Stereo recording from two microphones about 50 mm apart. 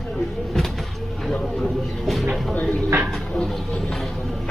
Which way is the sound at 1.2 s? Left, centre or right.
Centre.